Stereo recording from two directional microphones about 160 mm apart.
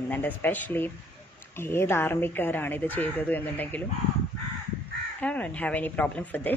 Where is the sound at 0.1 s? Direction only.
10° left (ahead or behind).